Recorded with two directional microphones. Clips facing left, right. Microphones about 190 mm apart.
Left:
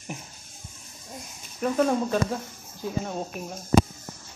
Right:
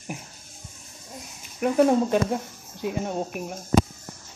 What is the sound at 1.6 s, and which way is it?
Speech, 20° right (ahead or behind).